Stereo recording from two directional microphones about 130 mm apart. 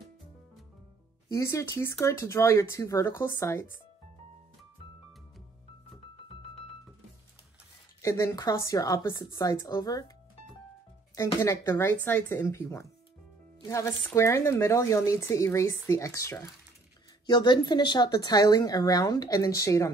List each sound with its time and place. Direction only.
1.3 s speech: 20° left (ahead or behind)
8.0 s speech: 25° left (ahead or behind)
11.4 s speech: 25° left (ahead or behind)
17.3 s speech: 35° left (ahead or behind)